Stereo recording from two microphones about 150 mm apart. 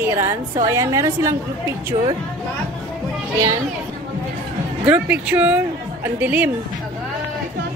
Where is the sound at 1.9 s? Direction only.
40° right (ahead or behind).